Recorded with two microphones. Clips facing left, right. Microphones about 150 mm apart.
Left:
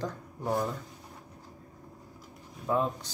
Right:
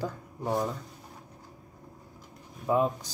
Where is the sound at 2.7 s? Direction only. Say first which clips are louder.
Right 3 dB; 20° right (ahead or behind).